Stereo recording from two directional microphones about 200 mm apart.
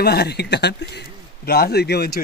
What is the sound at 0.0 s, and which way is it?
Speech, 55° left (ahead or behind).